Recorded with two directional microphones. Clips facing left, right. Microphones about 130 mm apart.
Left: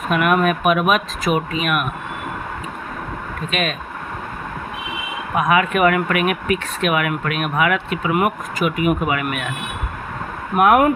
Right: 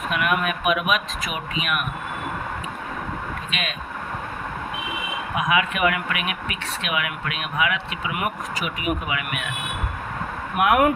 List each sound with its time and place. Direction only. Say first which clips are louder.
0.1 s speech: left 7 dB; 45° left (ahead or behind)
3.5 s speech: left 11 dB; 45° left (ahead or behind)
5.3 s speech: left 6 dB; 50° left (ahead or behind)
10.5 s speech: left 5 dB; 40° left (ahead or behind)